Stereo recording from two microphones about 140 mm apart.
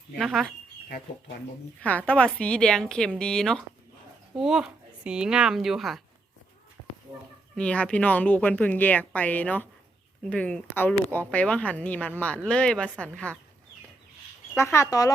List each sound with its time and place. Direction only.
0.2 s speech: centre (ahead or behind)
1.8 s speech: 10° left (ahead or behind)
7.5 s speech: 10° left (ahead or behind)
14.5 s speech: 20° left (ahead or behind)